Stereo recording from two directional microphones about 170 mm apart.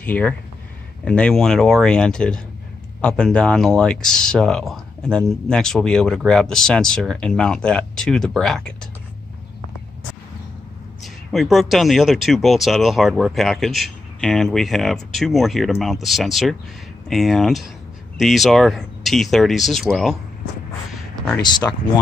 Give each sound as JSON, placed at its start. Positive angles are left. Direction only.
{"t": 0.0, "sound": "speech", "side_deg": 10}
{"t": 11.3, "sound": "speech", "side_deg": 0}
{"t": 21.4, "sound": "speech", "side_deg": 25}